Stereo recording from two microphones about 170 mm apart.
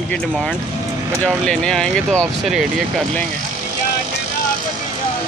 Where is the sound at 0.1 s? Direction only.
5° left (ahead or behind).